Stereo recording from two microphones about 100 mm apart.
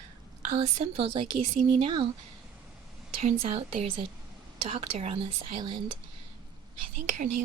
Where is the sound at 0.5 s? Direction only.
75° right (ahead or behind).